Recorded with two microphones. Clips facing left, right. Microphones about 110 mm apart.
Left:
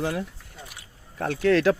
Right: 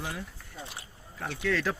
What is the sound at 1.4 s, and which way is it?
Speech, 70° left (ahead or behind).